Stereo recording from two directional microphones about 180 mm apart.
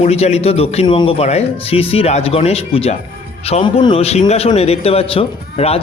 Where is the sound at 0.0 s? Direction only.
35° left (ahead or behind).